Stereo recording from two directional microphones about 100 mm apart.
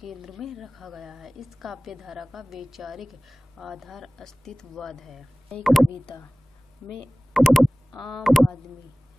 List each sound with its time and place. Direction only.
0.0 s a woman's voice: centre (ahead or behind)
7.3 s a woman's voice: centre (ahead or behind)